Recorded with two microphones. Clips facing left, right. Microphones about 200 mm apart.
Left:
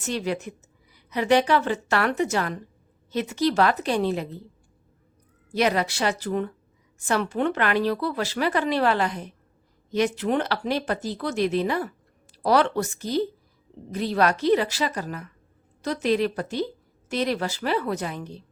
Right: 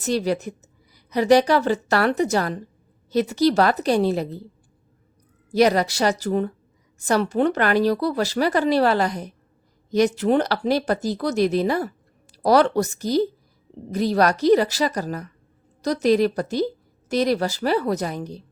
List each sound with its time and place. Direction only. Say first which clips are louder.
0.0 s speech: right 5 dB; 35° right (ahead or behind)
5.5 s speech: right 5 dB; 40° right (ahead or behind)